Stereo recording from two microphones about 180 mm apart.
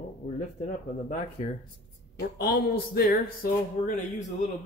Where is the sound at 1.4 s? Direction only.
35° left (ahead or behind).